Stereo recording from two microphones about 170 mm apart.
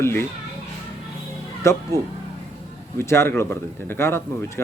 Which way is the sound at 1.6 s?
15° left (ahead or behind).